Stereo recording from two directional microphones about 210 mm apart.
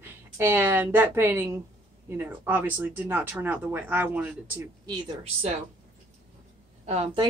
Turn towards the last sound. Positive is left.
turn(degrees=-30)  # may be behind; listen again after turning